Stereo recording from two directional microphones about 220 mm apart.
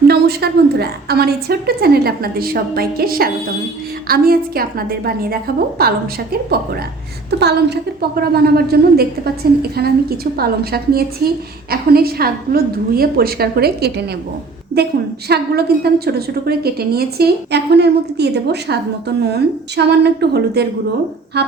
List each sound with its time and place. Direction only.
0.1 s a woman's voice: 45° right (ahead or behind)
7.3 s a woman's voice: 50° right (ahead or behind)
15.3 s a woman's voice: 45° right (ahead or behind)
21.3 s music: 50° right (ahead or behind)